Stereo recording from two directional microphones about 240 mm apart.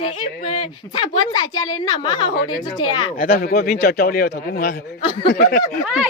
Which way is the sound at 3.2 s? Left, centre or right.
Left.